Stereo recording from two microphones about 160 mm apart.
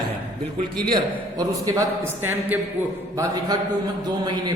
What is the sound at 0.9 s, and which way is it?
A man's voice, 20° right (ahead or behind).